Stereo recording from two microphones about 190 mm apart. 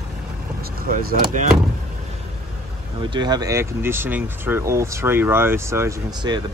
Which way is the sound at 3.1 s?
20° right (ahead or behind).